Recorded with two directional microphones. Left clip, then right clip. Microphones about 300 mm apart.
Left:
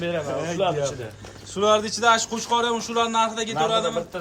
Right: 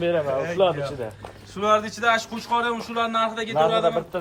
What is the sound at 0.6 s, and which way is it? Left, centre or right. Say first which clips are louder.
Speech: right 3 dB; right.